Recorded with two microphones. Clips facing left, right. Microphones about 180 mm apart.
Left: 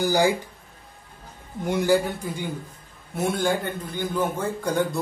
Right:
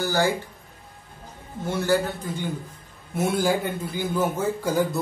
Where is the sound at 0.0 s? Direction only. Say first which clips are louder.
Left 3 dB; 15° left (ahead or behind).